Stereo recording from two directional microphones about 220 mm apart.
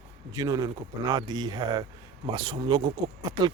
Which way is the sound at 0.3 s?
15° right (ahead or behind).